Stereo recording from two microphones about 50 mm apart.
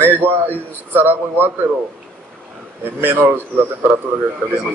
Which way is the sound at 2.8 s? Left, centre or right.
Right.